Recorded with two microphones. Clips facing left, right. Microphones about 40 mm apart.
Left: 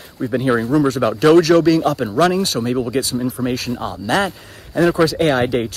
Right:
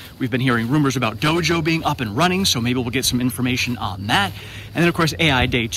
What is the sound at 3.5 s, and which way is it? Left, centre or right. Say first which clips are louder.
Speech: even; right.